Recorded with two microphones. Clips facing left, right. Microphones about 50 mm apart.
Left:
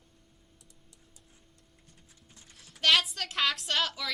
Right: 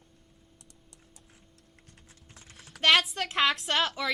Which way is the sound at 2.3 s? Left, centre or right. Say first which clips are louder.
Right 4 dB; right.